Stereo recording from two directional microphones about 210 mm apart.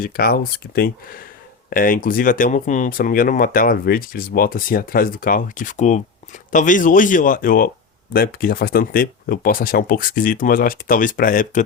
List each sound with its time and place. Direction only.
0.0 s speech: 45° left (ahead or behind)